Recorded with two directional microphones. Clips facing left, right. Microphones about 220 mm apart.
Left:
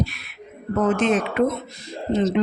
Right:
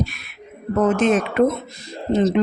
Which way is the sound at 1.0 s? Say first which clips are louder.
Right 3 dB; 45° right (ahead or behind).